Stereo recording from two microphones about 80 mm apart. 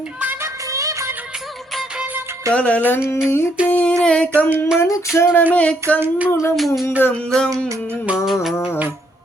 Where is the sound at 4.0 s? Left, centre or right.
Centre.